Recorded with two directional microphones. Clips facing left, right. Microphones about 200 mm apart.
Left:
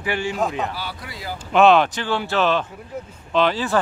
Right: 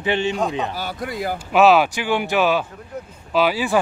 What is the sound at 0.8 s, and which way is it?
Speech, 45° right (ahead or behind).